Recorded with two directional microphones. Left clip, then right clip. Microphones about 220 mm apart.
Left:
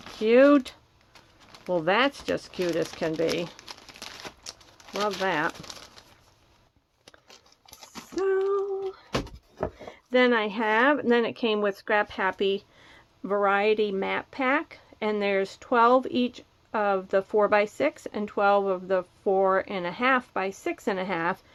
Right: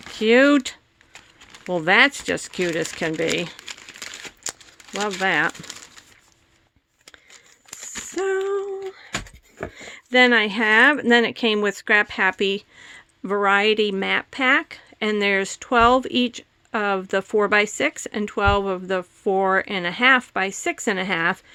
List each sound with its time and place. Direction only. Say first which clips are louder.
0.2 s speech: right 3 dB; 55° right (ahead or behind)
3.7 s crumpling: right 7 dB; 15° right (ahead or behind)
4.4 s crumpling: right 9 dB; 50° right (ahead or behind)
5.0 s speech: right 6 dB; 55° right (ahead or behind)
8.2 s a sound: right 2 dB; 45° right (ahead or behind)
9.7 s speech: right 7 dB; 55° right (ahead or behind)